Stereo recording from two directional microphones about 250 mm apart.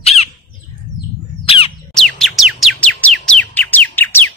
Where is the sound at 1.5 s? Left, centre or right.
Left.